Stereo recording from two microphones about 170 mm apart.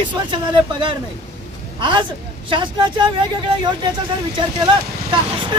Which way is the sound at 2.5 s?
30° right (ahead or behind).